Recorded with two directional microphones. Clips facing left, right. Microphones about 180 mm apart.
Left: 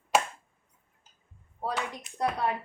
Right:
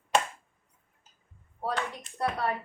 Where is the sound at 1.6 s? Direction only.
15° left (ahead or behind).